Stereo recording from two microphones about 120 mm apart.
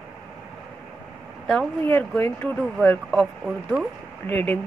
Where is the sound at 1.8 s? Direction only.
15° left (ahead or behind).